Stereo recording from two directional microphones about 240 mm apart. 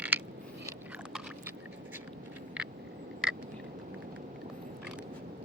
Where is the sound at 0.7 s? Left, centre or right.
Centre.